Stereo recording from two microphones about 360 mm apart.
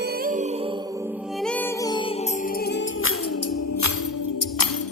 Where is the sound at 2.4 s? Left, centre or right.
Left.